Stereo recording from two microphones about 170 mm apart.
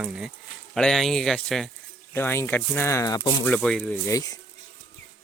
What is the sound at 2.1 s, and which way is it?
Speech, 15° left (ahead or behind).